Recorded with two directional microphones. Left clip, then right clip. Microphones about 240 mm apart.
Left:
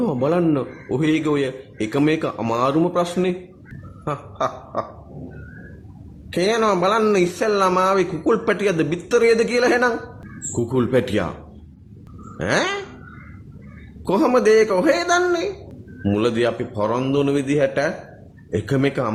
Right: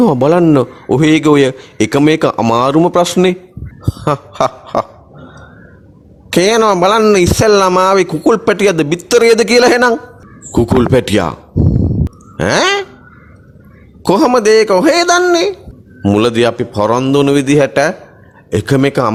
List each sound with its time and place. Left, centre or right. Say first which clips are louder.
0.0 s speech: right 10 dB; right
4.0 s a sound: right 10 dB; right
6.3 s speech: right 9 dB; right
12.4 s speech: right 9 dB; right
14.0 s speech: right 7 dB; right